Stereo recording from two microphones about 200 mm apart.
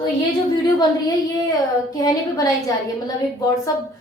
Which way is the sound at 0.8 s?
20° left (ahead or behind).